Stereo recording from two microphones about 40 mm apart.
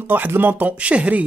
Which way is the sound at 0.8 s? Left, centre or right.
Right.